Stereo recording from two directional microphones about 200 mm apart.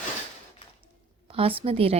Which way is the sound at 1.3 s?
30° right (ahead or behind).